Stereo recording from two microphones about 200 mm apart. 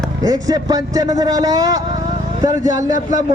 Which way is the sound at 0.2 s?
15° right (ahead or behind).